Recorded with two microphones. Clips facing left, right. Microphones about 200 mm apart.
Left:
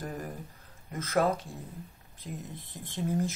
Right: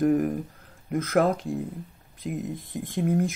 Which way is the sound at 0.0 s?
55° right (ahead or behind).